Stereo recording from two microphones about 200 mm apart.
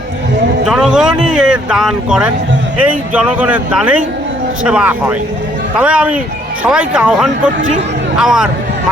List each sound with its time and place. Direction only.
0.7 s speech: 5° right (ahead or behind)